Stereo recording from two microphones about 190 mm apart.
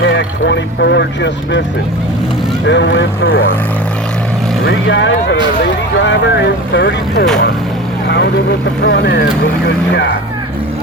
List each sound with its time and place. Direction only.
0.0 s speech: 65° left (ahead or behind)
2.6 s speech: 70° left (ahead or behind)
4.6 s speech: 70° left (ahead or behind)
8.0 s vehicle: 65° left (ahead or behind)
8.8 s speech: 60° left (ahead or behind)